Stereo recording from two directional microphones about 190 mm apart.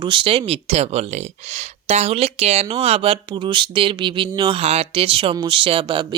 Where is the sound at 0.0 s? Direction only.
25° right (ahead or behind).